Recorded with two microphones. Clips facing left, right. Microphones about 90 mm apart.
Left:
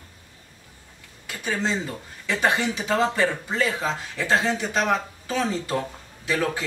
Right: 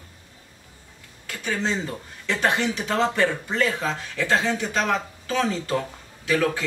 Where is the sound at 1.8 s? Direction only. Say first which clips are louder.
Right 1 dB; centre (ahead or behind).